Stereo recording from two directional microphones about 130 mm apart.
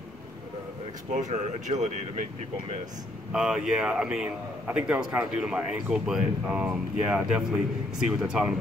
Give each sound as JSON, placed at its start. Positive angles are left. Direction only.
{"t": 1.1, "sound": "speech", "side_deg": -70}
{"t": 3.3, "sound": "a man's voice", "side_deg": -5}